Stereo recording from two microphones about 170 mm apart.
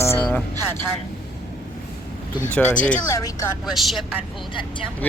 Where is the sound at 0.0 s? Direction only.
15° left (ahead or behind).